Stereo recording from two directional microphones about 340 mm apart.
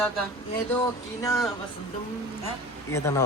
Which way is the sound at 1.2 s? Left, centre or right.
Centre.